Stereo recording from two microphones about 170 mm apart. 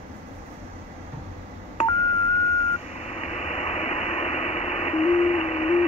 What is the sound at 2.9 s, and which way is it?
Vehicle, 40° left (ahead or behind).